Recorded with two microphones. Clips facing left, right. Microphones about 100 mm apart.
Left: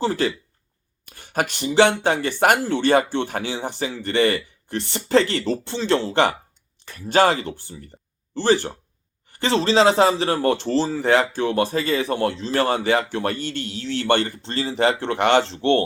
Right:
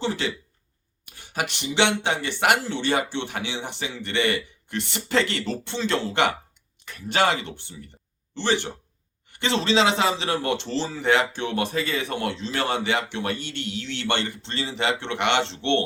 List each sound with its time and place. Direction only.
0.0 s speech: 40° left (ahead or behind)